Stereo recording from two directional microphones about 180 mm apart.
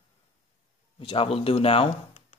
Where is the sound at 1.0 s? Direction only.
30° left (ahead or behind).